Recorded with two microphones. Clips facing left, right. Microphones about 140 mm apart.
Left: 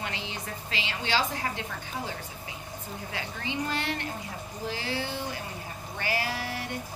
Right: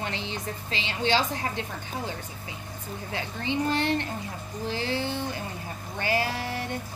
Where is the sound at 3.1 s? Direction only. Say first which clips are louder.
Right 5 dB; 25° right (ahead or behind).